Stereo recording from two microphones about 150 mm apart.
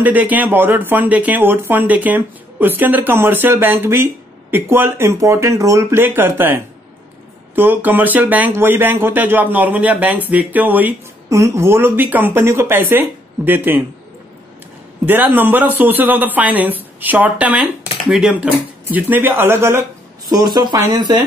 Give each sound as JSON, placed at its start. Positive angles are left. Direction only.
{"t": 0.0, "sound": "speech", "side_deg": -10}
{"t": 15.0, "sound": "speech", "side_deg": -15}
{"t": 20.2, "sound": "speech", "side_deg": -25}